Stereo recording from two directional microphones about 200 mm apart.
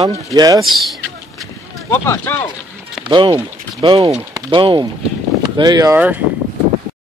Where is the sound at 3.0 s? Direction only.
20° right (ahead or behind).